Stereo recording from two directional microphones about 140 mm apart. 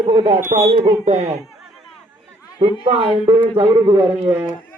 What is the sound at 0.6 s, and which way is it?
Speech, 25° right (ahead or behind).